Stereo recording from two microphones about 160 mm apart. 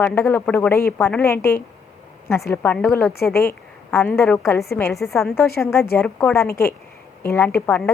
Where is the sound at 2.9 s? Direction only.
15° left (ahead or behind).